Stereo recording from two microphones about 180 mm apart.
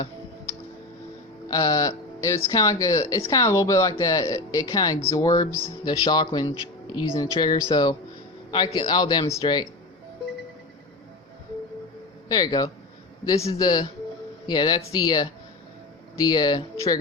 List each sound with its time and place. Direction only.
1.5 s speech: 20° left (ahead or behind)
12.3 s speech: 20° left (ahead or behind)